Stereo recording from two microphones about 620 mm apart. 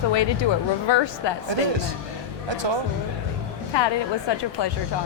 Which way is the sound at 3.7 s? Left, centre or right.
Left.